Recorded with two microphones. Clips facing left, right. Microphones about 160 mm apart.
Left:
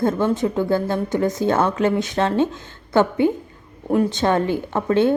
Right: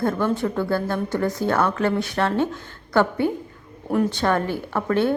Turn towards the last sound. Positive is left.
turn(degrees=20)  # may be behind; listen again after turning